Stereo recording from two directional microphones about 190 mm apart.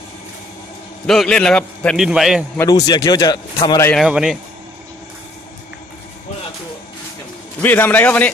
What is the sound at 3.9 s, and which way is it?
Speech, 5° right (ahead or behind).